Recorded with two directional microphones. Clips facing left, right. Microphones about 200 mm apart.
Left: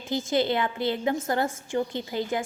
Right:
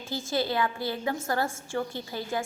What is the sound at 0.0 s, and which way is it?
A woman's voice, 20° left (ahead or behind).